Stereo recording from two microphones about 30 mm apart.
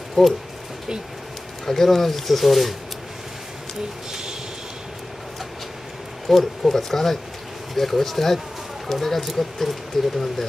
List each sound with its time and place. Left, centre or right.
0.2 s speech: centre
1.7 s speech: centre
4.1 s a sound: centre
6.3 s speech: centre